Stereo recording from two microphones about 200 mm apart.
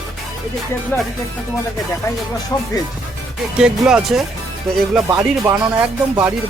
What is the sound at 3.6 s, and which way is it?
Speech, 5° right (ahead or behind).